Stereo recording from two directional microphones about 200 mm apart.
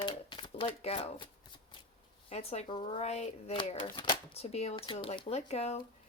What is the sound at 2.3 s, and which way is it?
Speech, 30° left (ahead or behind).